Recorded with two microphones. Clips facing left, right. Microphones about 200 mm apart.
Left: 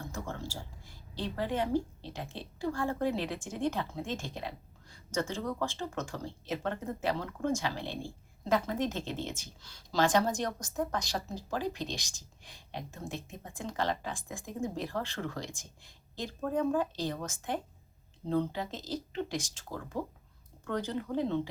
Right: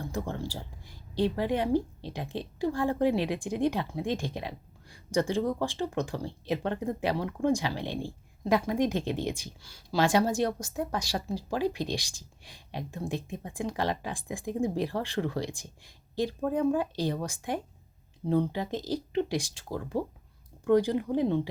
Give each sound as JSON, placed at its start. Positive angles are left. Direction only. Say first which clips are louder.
{"t": 0.1, "sound": "speech", "louder": "right 6 dB", "side_deg": -15}